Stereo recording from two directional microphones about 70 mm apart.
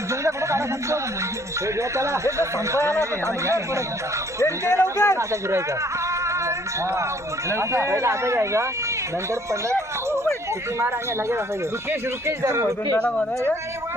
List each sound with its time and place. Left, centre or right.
0.3 s music: right
1.6 s speech: right
4.8 s speech: left
5.1 s speech: right
7.5 s speech: right
12.4 s speech: right
13.0 s speech: centre